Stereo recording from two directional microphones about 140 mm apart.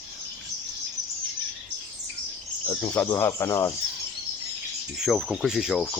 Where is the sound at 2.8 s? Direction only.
10° left (ahead or behind).